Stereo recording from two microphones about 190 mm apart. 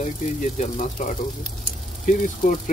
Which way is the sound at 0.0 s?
40° left (ahead or behind).